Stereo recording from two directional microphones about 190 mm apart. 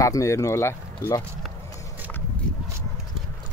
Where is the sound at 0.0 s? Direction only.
15° left (ahead or behind).